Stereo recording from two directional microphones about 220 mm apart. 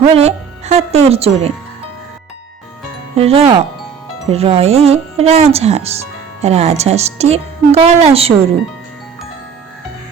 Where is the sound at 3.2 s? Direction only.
25° right (ahead or behind).